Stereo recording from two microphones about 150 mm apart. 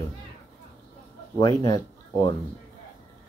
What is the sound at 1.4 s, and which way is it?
Speech, 30° left (ahead or behind).